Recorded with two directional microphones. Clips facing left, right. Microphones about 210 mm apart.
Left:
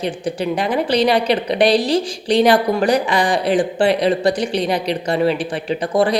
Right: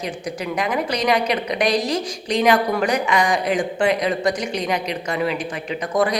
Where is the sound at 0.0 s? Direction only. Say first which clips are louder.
Left 6 dB; 30° left (ahead or behind).